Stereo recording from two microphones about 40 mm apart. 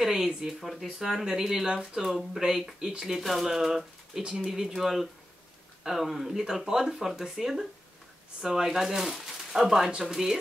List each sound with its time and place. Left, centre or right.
0.4 s speech: centre
3.2 s speech: centre
4.2 s speech: right
4.5 s speech: centre